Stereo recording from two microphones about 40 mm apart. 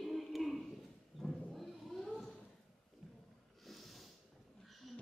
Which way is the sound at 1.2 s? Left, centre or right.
Centre.